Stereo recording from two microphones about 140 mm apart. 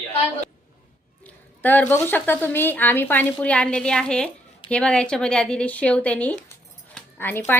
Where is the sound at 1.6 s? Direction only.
15° left (ahead or behind).